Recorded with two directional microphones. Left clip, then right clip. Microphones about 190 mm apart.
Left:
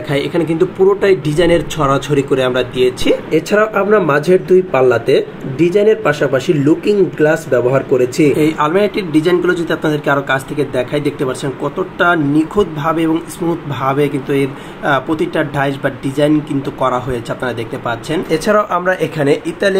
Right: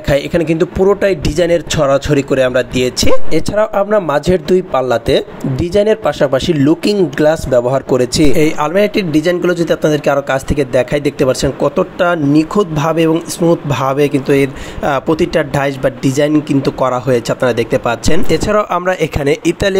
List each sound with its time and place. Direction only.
0.1 s speech: 35° right (ahead or behind)